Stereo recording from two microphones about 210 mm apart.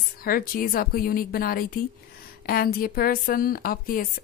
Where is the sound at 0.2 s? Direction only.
45° left (ahead or behind).